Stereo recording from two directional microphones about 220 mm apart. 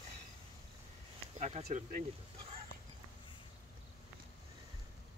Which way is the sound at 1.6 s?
40° right (ahead or behind).